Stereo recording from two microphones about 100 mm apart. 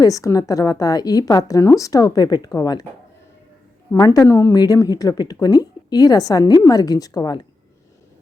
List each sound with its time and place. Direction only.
0.0 s a woman's voice: 35° left (ahead or behind)
3.9 s a woman's voice: 35° left (ahead or behind)
4.5 s a woman's voice: 40° left (ahead or behind)